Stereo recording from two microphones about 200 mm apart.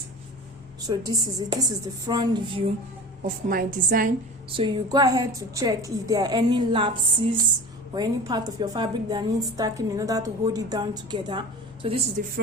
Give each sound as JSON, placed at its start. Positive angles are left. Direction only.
{"t": 0.9, "sound": "a woman's voice", "side_deg": -20}
{"t": 3.2, "sound": "a woman's voice", "side_deg": -45}
{"t": 4.5, "sound": "a woman's voice", "side_deg": -25}
{"t": 7.9, "sound": "a woman's voice", "side_deg": -20}
{"t": 12.2, "sound": "a woman's voice", "side_deg": -40}